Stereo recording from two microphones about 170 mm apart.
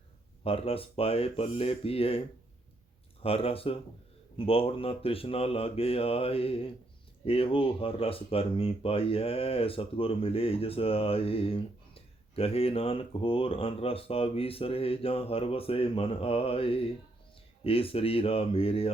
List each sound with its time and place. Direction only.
0.4 s speech: 35° left (ahead or behind)
3.2 s speech: 35° left (ahead or behind)